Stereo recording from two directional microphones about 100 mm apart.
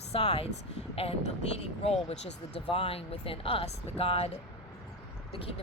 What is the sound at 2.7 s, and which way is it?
Speech, 70° left (ahead or behind).